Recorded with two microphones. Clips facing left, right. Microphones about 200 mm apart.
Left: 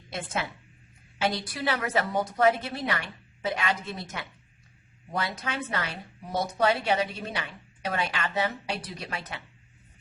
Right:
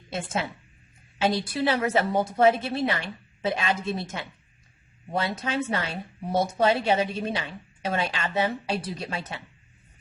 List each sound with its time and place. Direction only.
0.1 s a woman's voice: 25° right (ahead or behind)
1.5 s a woman's voice: 25° right (ahead or behind)